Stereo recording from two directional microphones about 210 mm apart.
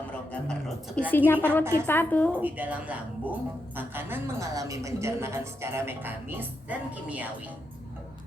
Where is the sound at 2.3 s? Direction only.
5° right (ahead or behind).